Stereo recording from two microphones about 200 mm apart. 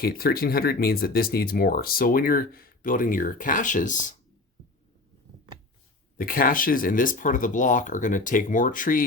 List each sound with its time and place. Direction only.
0.0 s speech: 50° left (ahead or behind)
6.1 s speech: 45° left (ahead or behind)